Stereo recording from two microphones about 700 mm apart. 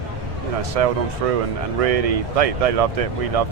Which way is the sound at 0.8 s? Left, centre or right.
Right.